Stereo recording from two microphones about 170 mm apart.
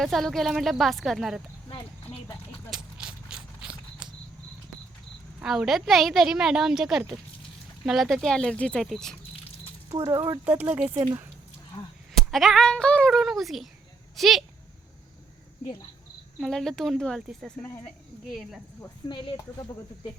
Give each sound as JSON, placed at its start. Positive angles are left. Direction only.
{"t": 0.0, "sound": "a woman's voice", "side_deg": 0}
{"t": 2.6, "sound": "a sound", "side_deg": -5}
{"t": 5.4, "sound": "a woman's voice", "side_deg": -5}
{"t": 9.9, "sound": "speech", "side_deg": -20}
{"t": 12.1, "sound": "a woman's voice", "side_deg": 0}
{"t": 16.4, "sound": "a woman's voice", "side_deg": 5}
{"t": 19.0, "sound": "speech", "side_deg": 30}